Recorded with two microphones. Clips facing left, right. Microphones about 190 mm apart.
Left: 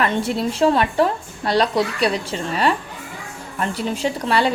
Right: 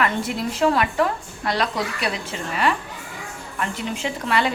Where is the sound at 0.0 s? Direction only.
30° left (ahead or behind).